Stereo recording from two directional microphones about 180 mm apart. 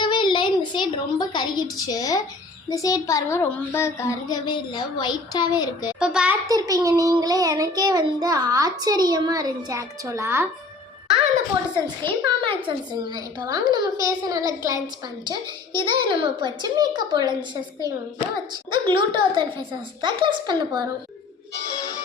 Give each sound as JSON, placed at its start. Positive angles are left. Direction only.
{"t": 0.0, "sound": "a woman's voice", "side_deg": 25}
{"t": 6.0, "sound": "a child's voice", "side_deg": -5}
{"t": 6.5, "sound": "a child's voice", "side_deg": -20}
{"t": 12.0, "sound": "a child's voice", "side_deg": -25}